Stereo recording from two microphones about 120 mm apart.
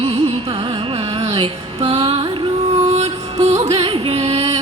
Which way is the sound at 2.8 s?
70° right (ahead or behind).